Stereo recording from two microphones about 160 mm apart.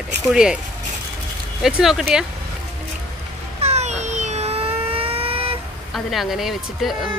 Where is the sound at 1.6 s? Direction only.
Centre (ahead or behind).